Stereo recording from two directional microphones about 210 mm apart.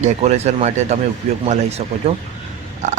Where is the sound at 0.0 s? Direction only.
30° right (ahead or behind).